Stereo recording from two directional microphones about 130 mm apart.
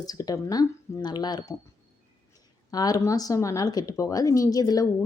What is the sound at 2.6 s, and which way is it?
Speech, 30° left (ahead or behind).